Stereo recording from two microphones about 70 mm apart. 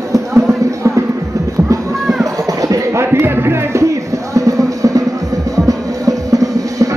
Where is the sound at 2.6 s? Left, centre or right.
Right.